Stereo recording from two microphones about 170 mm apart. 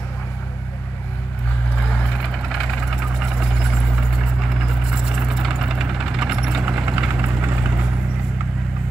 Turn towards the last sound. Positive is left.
turn(degrees=-10)  # may be behind; listen again after turning